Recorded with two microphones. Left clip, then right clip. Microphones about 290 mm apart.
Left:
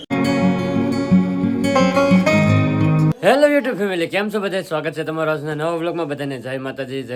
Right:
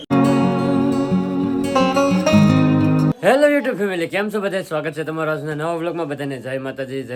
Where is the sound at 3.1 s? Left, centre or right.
Centre.